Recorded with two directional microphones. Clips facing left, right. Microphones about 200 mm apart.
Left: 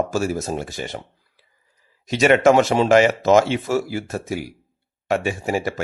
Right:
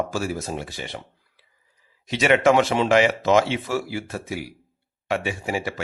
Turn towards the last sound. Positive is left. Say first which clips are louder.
# left 4 dB
turn(degrees=45)  # may be behind; listen again after turning